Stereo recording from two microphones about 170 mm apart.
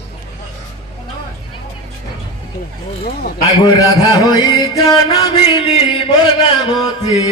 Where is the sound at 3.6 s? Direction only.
25° left (ahead or behind).